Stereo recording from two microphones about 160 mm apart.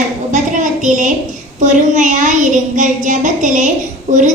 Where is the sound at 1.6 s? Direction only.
50° right (ahead or behind).